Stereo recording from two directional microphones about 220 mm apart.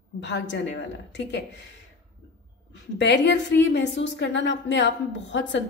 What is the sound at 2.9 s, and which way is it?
A woman's voice, 55° left (ahead or behind).